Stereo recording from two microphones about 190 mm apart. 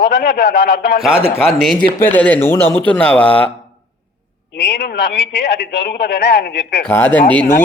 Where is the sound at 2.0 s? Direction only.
10° left (ahead or behind).